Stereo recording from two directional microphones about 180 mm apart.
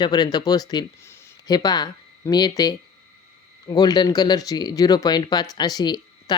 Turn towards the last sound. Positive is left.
turn(degrees=25)  # may be behind; listen again after turning